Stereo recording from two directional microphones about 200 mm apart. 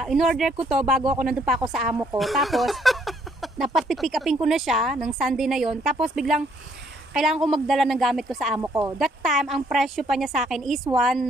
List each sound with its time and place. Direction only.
0.0 s speech: centre (ahead or behind)
8.5 s speech: 15° right (ahead or behind)
8.9 s speech: centre (ahead or behind)